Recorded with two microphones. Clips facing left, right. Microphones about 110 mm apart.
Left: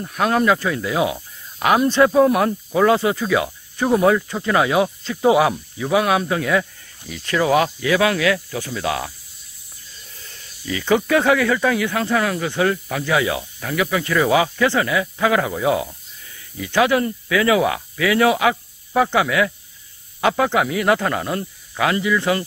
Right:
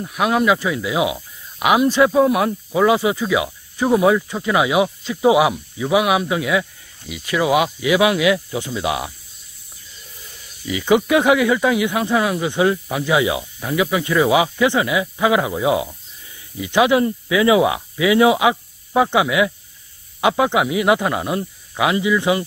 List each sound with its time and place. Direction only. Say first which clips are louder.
0.0 s speech: even; 5° right (ahead or behind)
10.2 s speech: right 2 dB; 15° right (ahead or behind)